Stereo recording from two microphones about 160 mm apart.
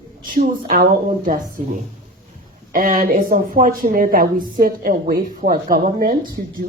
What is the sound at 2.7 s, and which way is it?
A woman's voice, 60° right (ahead or behind).